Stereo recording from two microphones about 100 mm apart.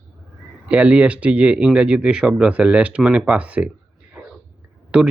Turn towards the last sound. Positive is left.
turn(degrees=-10)  # may be behind; listen again after turning